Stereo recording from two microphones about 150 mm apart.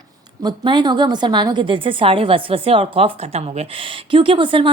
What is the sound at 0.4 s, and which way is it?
A woman's voice, 30° right (ahead or behind).